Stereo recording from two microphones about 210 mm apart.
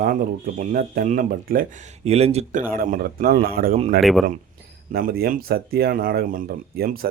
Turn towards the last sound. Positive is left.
turn(degrees=-45)  # may be behind; listen again after turning